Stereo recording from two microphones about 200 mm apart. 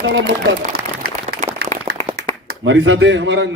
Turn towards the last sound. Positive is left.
turn(degrees=-65)  # may be behind; listen again after turning